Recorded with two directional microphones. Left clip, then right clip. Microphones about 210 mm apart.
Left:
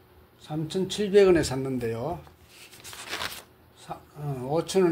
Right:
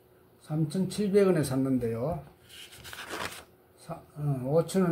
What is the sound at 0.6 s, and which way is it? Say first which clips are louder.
Speech: left 6 dB; 20° left (ahead or behind).